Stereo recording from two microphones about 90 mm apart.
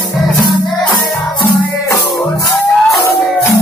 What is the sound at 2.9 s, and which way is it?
Music, 35° left (ahead or behind).